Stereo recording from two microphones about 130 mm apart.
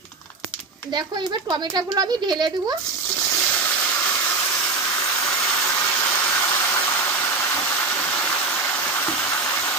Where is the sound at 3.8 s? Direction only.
15° left (ahead or behind).